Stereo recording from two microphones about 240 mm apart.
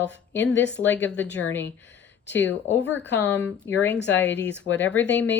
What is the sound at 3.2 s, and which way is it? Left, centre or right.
Speech, centre.